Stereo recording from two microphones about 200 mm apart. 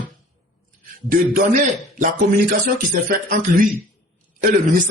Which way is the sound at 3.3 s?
45° right (ahead or behind).